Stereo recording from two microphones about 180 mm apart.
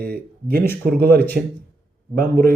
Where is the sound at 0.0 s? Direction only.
55° right (ahead or behind).